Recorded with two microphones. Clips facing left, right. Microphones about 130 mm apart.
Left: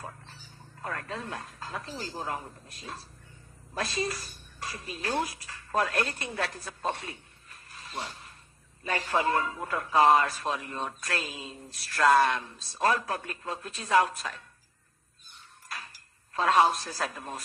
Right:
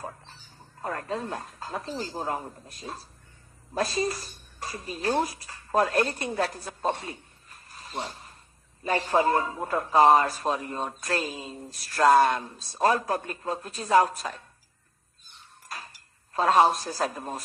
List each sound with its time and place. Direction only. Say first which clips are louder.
0.8 s speech: right 5 dB; 35° right (ahead or behind)
7.9 s filing: right 3 dB; 30° right (ahead or behind)
9.0 s speech: right 3 dB; 35° right (ahead or behind)
16.5 s speech: right 2 dB; 40° right (ahead or behind)